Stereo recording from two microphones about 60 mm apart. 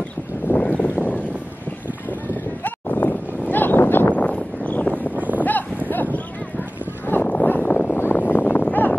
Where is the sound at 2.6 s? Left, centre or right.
Left.